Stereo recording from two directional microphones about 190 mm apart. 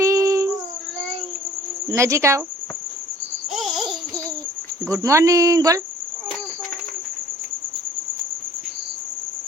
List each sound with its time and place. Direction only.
0.0 s a sound: 15° right (ahead or behind)
1.9 s speech: 15° right (ahead or behind)
3.5 s babbling: centre (ahead or behind)
4.9 s speech: 15° right (ahead or behind)